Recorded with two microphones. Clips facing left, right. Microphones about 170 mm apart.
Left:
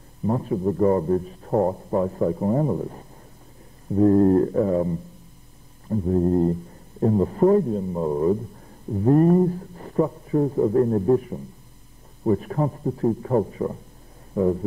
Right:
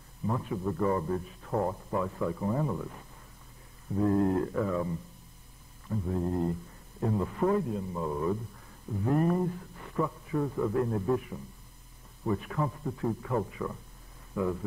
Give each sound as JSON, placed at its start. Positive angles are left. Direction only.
{"t": 0.3, "sound": "a man's voice", "side_deg": 35}